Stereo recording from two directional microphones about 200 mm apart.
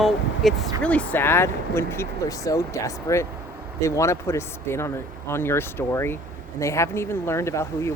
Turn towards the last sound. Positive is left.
turn(degrees=15)  # may be behind; listen again after turning